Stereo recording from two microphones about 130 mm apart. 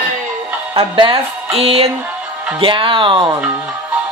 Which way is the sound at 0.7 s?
45° right (ahead or behind).